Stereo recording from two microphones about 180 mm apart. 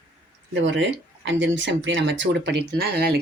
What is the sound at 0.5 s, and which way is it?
Speech, 90° right.